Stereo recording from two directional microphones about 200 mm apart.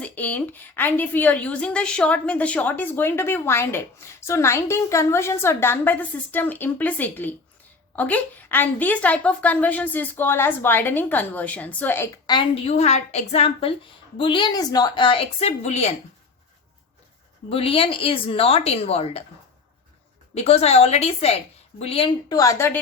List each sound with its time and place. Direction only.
0.0 s a woman's voice: 10° left (ahead or behind); by 16.0 s 35° left (ahead or behind)
17.5 s a woman's voice: 30° left (ahead or behind)
20.3 s a woman's voice: 30° left (ahead or behind); by 22.8 s 10° left (ahead or behind)